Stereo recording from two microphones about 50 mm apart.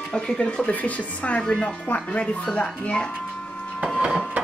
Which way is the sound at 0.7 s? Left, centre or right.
Left.